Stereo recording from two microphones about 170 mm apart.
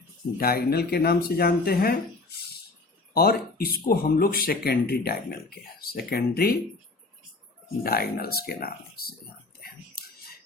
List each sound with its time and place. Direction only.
0.3 s speech: 65° left (ahead or behind)
3.2 s speech: 65° left (ahead or behind)
7.9 s speech: 65° left (ahead or behind)
9.6 s a sound: 65° left (ahead or behind)